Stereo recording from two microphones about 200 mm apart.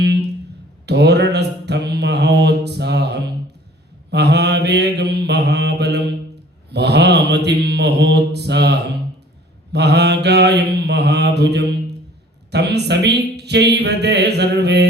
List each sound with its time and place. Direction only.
0.0 s a sound: 55° right (ahead or behind)
0.9 s mantra: 55° right (ahead or behind)
6.7 s speech: 55° right (ahead or behind)